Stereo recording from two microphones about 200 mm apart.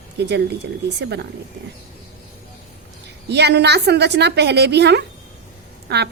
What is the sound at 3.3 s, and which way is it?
A woman's voice, 55° right (ahead or behind).